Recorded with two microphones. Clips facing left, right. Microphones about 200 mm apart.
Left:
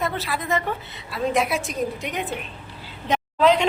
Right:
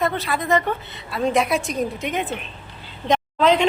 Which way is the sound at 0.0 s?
5° left (ahead or behind).